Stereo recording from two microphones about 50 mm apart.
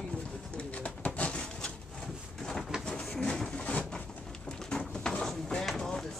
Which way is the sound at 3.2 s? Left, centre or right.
Centre.